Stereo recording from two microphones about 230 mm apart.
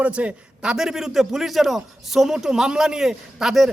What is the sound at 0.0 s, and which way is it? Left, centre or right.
A man's voice, centre.